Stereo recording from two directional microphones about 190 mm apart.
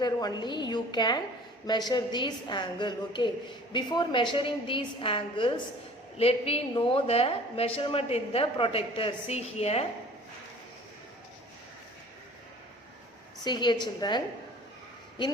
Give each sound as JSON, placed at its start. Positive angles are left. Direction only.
{"t": 0.0, "sound": "a woman's voice", "side_deg": 20}
{"t": 13.4, "sound": "a woman's voice", "side_deg": 25}